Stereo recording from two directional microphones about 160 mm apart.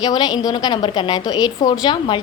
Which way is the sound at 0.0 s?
25° left (ahead or behind).